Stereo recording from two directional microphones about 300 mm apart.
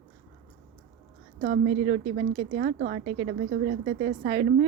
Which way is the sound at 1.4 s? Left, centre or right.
Right.